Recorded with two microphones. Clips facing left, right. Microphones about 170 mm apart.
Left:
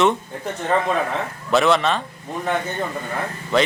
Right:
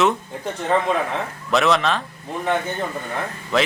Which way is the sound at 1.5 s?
Centre (ahead or behind).